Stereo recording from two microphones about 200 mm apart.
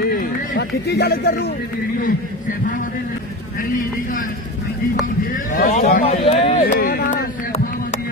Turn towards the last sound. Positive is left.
turn(degrees=50)  # may be behind; listen again after turning